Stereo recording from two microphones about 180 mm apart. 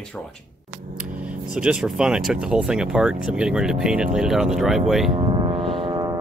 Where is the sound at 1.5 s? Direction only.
5° right (ahead or behind).